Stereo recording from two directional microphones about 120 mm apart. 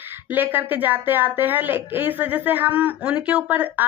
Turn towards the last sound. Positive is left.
turn(degrees=-15)  # may be behind; listen again after turning